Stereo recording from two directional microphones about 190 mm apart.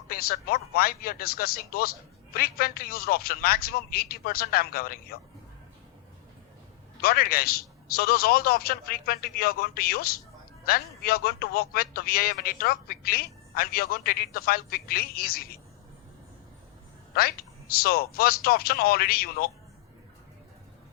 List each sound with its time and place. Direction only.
0.1 s a man's voice: 50° left (ahead or behind)
7.0 s a man's voice: 55° left (ahead or behind)
17.8 s a man's voice: 50° left (ahead or behind)